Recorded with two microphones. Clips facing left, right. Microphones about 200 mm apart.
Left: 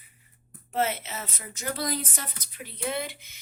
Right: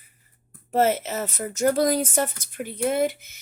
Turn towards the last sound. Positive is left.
turn(degrees=-45)  # may be behind; listen again after turning